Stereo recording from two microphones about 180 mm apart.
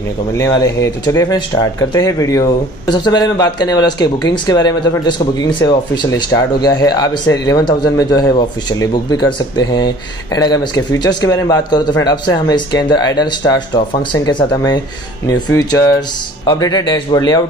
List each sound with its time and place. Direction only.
0.3 s speech: 20° left (ahead or behind)